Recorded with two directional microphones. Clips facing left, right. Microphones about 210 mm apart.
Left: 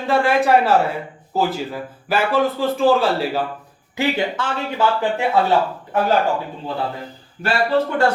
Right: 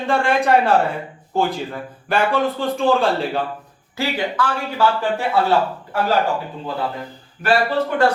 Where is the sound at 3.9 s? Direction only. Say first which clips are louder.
Left 2 dB; 25° left (ahead or behind).